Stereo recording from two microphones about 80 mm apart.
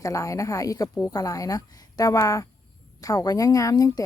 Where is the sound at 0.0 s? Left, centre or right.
Left.